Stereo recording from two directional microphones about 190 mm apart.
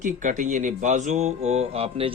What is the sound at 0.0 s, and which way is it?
Speech, 40° right (ahead or behind).